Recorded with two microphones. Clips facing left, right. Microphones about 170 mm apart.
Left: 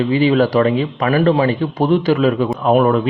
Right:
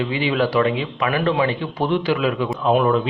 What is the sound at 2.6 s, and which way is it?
Speech, 50° left (ahead or behind).